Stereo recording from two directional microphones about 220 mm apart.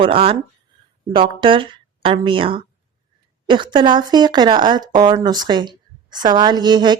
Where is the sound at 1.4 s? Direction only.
25° right (ahead or behind).